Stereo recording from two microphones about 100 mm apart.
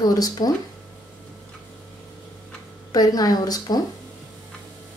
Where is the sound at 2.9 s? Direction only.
40° left (ahead or behind).